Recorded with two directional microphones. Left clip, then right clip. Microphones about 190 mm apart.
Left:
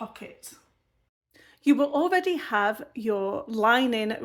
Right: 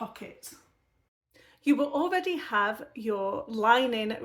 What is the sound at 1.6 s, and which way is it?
Speech, 30° left (ahead or behind).